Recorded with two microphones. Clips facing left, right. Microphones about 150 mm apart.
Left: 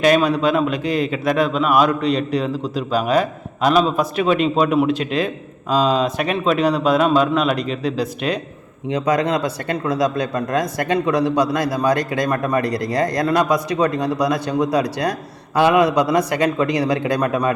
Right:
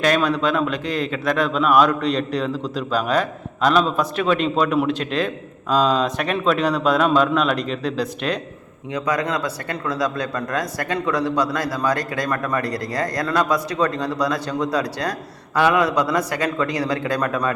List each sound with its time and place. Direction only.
0.0 s a man's voice: 10° left (ahead or behind)
8.9 s a man's voice: 20° left (ahead or behind)